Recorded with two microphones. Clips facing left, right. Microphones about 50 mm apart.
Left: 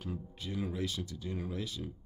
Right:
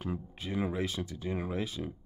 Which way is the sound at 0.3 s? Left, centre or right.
Right.